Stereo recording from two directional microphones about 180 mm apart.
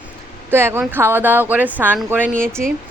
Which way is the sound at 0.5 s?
10° right (ahead or behind).